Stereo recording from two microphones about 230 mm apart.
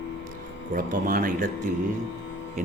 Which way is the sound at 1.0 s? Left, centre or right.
Right.